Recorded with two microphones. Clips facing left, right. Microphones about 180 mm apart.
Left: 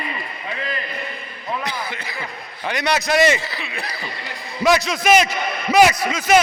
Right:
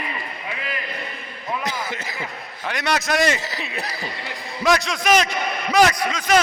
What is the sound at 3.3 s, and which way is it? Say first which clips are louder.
Speech: even; 40° right (ahead or behind).